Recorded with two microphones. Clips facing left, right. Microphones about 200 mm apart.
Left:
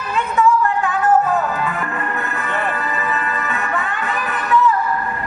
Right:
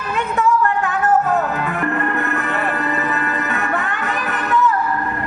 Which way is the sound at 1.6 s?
65° right (ahead or behind).